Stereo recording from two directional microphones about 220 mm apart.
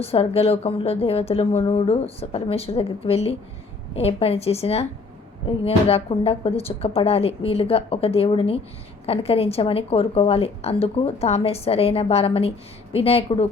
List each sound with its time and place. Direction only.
0.0 s a woman's voice: 25° left (ahead or behind)